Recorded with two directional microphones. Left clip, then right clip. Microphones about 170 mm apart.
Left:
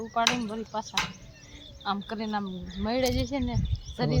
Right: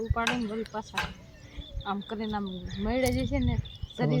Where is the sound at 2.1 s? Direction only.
15° left (ahead or behind).